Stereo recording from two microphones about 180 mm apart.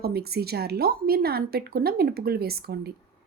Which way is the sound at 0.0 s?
60° right (ahead or behind).